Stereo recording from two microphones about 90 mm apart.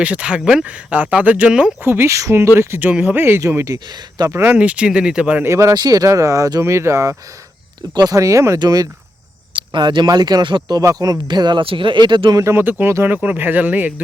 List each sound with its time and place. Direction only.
0.0 s speech: 15° right (ahead or behind)
1.8 s speech: 25° right (ahead or behind)
3.8 s speech: 50° right (ahead or behind)
4.3 s speech: 25° right (ahead or behind)
4.5 s speech: 15° right (ahead or behind)
5.4 s speech: 30° right (ahead or behind)
5.7 s speech: 45° right (ahead or behind)
7.8 s speech: 50° right (ahead or behind)
8.5 s speech: 50° right (ahead or behind)
9.6 s speech: 60° right (ahead or behind)
10.8 s speech: 45° right (ahead or behind)
11.6 s speech: 80° right; by 12.4 s 60° right (ahead or behind)
12.4 s speech: 30° right (ahead or behind)